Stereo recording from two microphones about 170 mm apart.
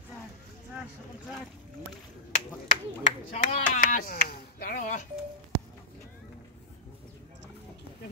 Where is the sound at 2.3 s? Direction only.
35° left (ahead or behind).